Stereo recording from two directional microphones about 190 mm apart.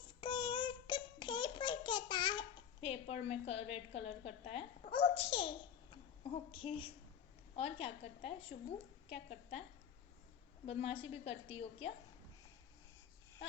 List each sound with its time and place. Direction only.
0.2 s child singing: 25° left (ahead or behind)
5.9 s a woman's voice: 30° left (ahead or behind)
10.7 s a woman's voice: 30° left (ahead or behind)